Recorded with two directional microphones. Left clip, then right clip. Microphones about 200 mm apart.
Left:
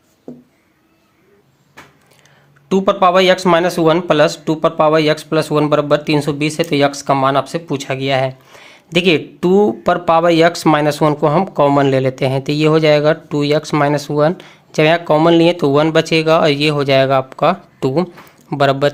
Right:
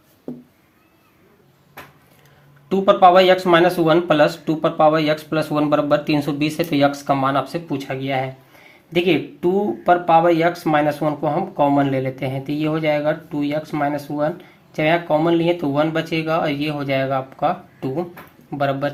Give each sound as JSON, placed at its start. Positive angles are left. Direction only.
{"t": 2.6, "sound": "speech", "side_deg": 35}